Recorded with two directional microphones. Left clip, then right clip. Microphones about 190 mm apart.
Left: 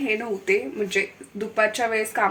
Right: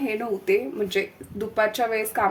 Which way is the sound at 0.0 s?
10° right (ahead or behind).